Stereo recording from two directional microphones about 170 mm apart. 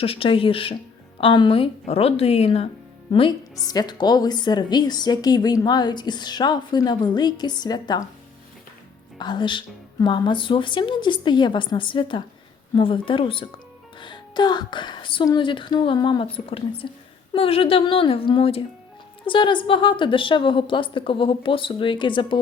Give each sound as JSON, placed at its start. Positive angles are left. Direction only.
{"t": 0.0, "sound": "a woman's voice", "side_deg": 35}
{"t": 9.1, "sound": "a woman's voice", "side_deg": 25}